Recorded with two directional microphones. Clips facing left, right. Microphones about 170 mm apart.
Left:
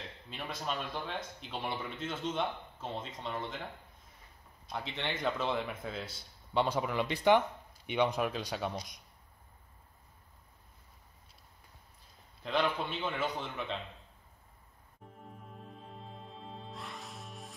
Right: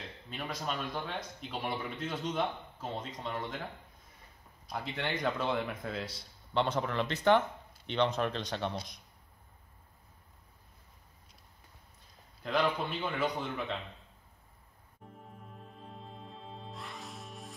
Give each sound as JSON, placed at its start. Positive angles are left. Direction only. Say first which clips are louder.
{"t": 0.3, "sound": "speech", "louder": "right 1 dB", "side_deg": 0}
{"t": 4.6, "sound": "speech", "louder": "right 1 dB", "side_deg": 0}
{"t": 12.4, "sound": "speech", "louder": "right 1 dB", "side_deg": 0}
{"t": 15.1, "sound": "music", "louder": "left 1 dB", "side_deg": 0}